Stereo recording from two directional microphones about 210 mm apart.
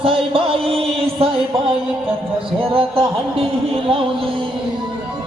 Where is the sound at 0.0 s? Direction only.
25° right (ahead or behind).